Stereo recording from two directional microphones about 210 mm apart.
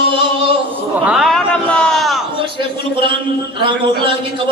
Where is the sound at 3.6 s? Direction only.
25° right (ahead or behind).